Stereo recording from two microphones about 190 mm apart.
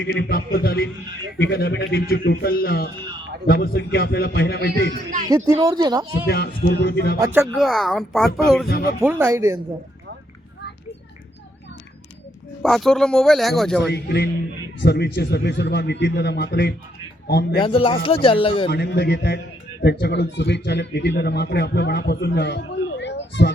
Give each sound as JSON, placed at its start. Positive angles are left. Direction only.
{"t": 0.0, "sound": "a man's voice", "side_deg": 65}
{"t": 5.3, "sound": "speech", "side_deg": -20}
{"t": 6.2, "sound": "a man's voice", "side_deg": 55}
{"t": 7.5, "sound": "a man's voice", "side_deg": 0}
{"t": 8.6, "sound": "a man's voice", "side_deg": 55}
{"t": 9.0, "sound": "speech", "side_deg": -10}
{"t": 12.6, "sound": "a man's voice", "side_deg": 0}
{"t": 13.8, "sound": "a man's voice", "side_deg": 60}
{"t": 17.6, "sound": "speech", "side_deg": 30}
{"t": 18.7, "sound": "a man's voice", "side_deg": 60}